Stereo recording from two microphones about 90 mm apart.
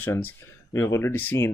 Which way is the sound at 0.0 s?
25° left (ahead or behind).